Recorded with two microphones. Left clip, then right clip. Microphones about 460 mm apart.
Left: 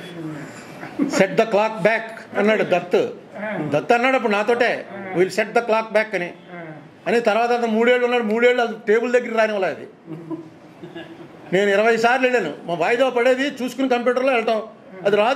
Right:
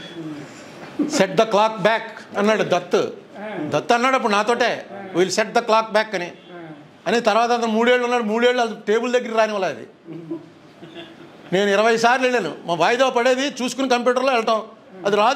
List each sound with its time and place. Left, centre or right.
1.1 s a man's voice: right
11.5 s a man's voice: right